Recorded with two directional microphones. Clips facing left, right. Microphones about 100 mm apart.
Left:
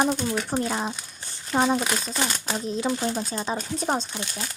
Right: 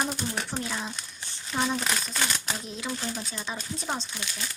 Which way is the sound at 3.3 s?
35° left (ahead or behind).